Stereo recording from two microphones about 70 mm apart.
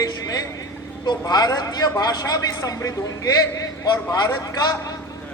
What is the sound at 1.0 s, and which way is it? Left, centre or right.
Speech, left.